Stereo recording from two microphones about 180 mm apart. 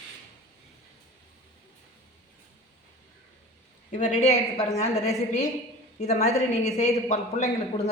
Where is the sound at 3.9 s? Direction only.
40° left (ahead or behind).